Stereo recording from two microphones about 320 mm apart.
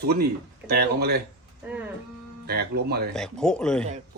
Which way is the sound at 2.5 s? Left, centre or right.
Right.